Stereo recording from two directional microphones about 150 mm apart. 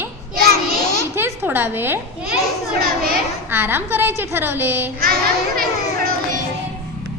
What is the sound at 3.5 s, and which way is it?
A woman's voice, 15° right (ahead or behind).